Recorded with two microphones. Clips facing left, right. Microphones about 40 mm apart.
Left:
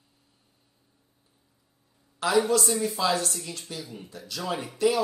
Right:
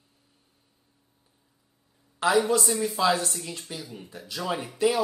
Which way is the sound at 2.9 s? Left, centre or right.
Right.